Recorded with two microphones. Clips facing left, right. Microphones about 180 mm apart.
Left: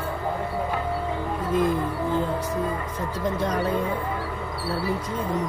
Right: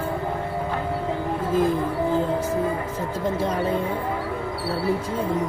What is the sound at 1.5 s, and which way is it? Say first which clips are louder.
Speech: right 1 dB; 30° right (ahead or behind).